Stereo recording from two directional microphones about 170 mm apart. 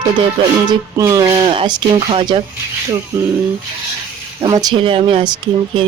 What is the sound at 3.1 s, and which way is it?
Speech, 15° right (ahead or behind).